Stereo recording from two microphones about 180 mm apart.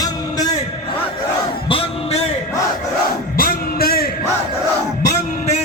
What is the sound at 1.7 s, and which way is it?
Music, 30° left (ahead or behind).